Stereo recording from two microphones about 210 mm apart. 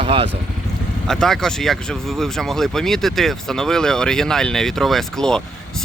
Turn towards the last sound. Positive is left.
turn(degrees=5)  # may be behind; listen again after turning